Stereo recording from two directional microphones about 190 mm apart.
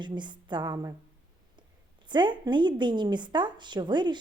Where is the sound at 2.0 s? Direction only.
25° right (ahead or behind).